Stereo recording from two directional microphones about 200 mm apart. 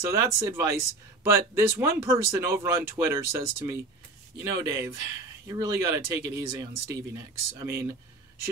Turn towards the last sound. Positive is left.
turn(degrees=-15)  # may be behind; listen again after turning